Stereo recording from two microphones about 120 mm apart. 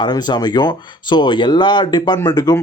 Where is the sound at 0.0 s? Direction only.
35° left (ahead or behind).